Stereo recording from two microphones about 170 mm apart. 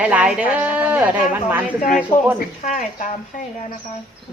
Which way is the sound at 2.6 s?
50° left (ahead or behind).